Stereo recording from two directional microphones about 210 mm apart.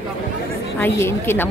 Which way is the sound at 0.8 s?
10° left (ahead or behind).